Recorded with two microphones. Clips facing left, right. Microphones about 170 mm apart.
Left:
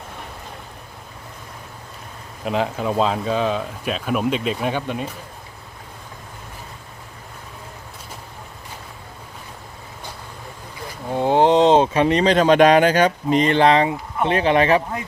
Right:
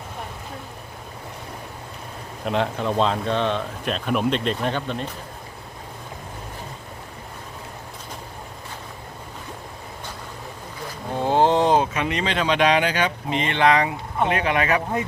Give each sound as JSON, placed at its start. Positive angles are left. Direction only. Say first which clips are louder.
{"t": 2.4, "sound": "speech", "louder": "left 1 dB", "side_deg": 5}
{"t": 11.1, "sound": "speech", "louder": "left 3 dB", "side_deg": 15}